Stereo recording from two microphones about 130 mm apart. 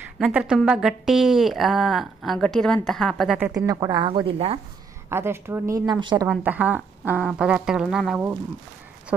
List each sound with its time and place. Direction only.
0.2 s a woman's voice: 10° right (ahead or behind)
3.5 s a woman's voice: 25° right (ahead or behind); by 4.6 s 45° right (ahead or behind)
5.1 s speech: 20° right (ahead or behind)
5.9 s a woman's voice: 35° right (ahead or behind)
6.3 s speech: 10° right (ahead or behind)